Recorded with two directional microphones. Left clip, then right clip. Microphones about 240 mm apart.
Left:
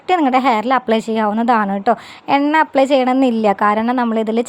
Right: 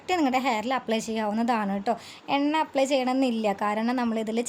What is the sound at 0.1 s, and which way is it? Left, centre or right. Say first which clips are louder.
A woman's voice: left 11 dB; centre.